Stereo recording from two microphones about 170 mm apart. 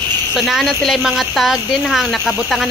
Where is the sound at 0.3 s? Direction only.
Centre (ahead or behind).